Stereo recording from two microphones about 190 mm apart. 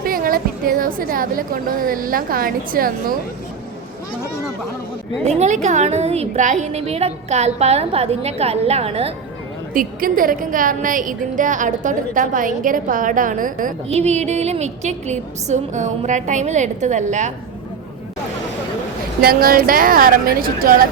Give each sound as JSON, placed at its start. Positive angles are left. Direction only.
{"t": 0.0, "sound": "a woman's voice", "side_deg": -50}
{"t": 5.4, "sound": "a woman's voice", "side_deg": -40}
{"t": 9.7, "sound": "a woman's voice", "side_deg": -45}
{"t": 19.2, "sound": "a woman's voice", "side_deg": -50}